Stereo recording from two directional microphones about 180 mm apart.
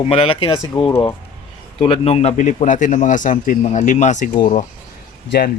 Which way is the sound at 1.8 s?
35° left (ahead or behind).